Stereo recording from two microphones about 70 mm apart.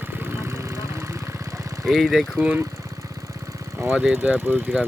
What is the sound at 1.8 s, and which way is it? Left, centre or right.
Speech, centre.